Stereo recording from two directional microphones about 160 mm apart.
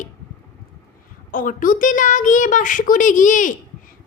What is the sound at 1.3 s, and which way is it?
Speech, 60° left (ahead or behind).